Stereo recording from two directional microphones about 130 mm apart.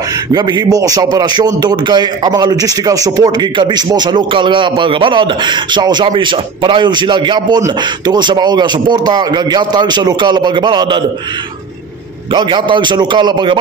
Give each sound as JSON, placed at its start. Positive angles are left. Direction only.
{"t": 0.3, "sound": "a man's voice", "side_deg": -35}
{"t": 12.3, "sound": "a man's voice", "side_deg": -40}